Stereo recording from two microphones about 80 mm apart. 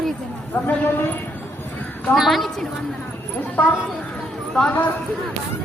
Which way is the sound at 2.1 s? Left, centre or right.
Centre.